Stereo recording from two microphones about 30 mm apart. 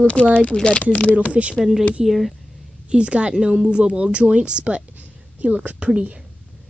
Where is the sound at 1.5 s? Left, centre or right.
Centre.